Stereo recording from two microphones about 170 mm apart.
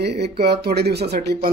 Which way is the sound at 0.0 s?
75° right (ahead or behind).